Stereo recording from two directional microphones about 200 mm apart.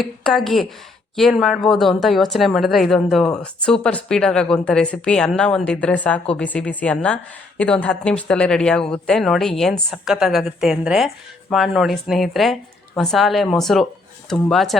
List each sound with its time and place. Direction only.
0.0 s a woman's voice: centre (ahead or behind)